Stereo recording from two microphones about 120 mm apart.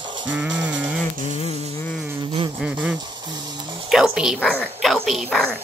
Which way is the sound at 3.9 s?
5° right (ahead or behind).